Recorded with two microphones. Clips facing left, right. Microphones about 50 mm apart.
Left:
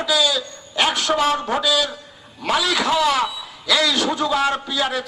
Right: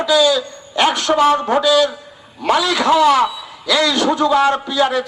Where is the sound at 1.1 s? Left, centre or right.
Centre.